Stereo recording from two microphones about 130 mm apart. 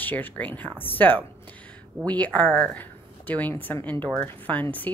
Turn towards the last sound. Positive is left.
turn(degrees=15)  # may be behind; listen again after turning